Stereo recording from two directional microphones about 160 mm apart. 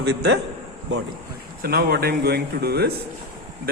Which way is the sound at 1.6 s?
70° right (ahead or behind).